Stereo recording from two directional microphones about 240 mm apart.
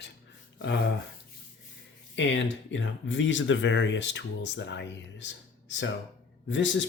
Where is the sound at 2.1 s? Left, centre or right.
Left.